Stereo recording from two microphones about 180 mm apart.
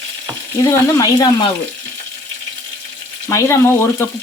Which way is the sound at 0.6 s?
15° left (ahead or behind).